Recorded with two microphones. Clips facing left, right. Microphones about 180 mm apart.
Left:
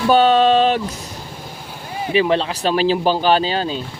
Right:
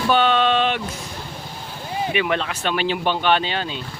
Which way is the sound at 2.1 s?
30° left (ahead or behind).